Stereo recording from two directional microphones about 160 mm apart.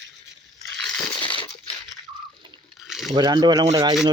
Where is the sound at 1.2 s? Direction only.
30° left (ahead or behind).